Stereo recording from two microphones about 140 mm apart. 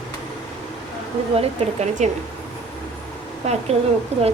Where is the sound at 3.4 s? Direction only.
55° right (ahead or behind).